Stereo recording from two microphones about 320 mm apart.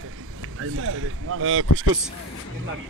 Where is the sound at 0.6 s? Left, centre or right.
Right.